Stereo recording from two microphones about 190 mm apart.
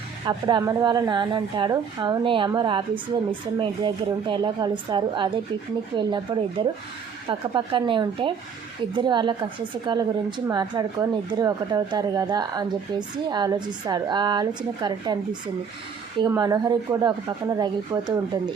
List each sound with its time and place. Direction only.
0.3 s a woman's voice: 20° right (ahead or behind)